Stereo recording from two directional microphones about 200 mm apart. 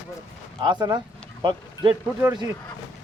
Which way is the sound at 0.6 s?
20° right (ahead or behind).